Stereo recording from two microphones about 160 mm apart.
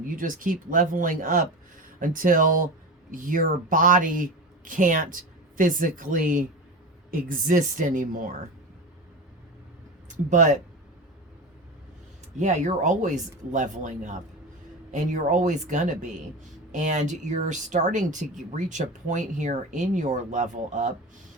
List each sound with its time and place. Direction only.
0.2 s speech: 55° right (ahead or behind)
10.1 s speech: 50° right (ahead or behind)
12.4 s speech: 50° right (ahead or behind)